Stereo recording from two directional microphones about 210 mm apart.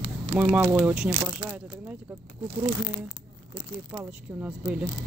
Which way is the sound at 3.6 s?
15° right (ahead or behind).